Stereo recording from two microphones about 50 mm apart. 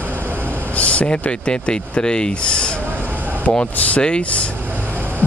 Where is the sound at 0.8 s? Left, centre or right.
Left.